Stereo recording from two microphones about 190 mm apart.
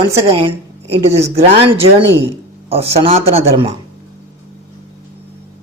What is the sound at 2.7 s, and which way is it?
Speech, 30° right (ahead or behind).